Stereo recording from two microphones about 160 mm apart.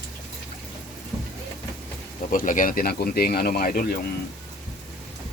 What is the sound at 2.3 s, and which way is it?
Speech, 55° left (ahead or behind).